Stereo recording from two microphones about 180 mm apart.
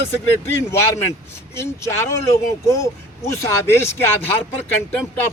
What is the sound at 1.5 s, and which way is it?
Speech, 15° left (ahead or behind).